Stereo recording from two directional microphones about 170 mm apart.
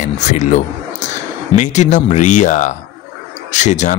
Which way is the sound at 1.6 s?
45° left (ahead or behind).